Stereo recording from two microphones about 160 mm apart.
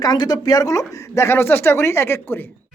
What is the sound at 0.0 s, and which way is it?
Speech, 25° left (ahead or behind).